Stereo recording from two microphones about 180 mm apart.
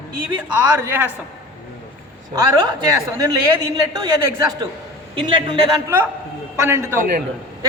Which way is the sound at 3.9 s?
20° right (ahead or behind).